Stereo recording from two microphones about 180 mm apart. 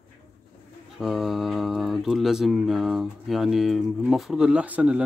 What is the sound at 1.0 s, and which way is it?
Speech, centre (ahead or behind).